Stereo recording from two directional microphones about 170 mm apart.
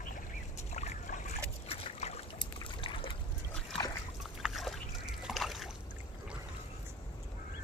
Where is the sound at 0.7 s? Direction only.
40° left (ahead or behind).